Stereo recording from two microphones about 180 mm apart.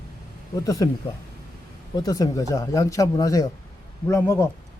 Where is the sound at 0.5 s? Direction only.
20° left (ahead or behind).